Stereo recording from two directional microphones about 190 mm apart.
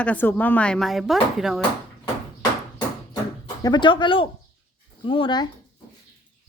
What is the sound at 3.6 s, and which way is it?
Speech, 25° left (ahead or behind).